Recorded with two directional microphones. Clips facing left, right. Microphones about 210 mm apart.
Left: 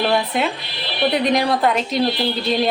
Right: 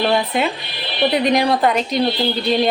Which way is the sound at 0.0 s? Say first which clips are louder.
Right 1 dB; centre (ahead or behind).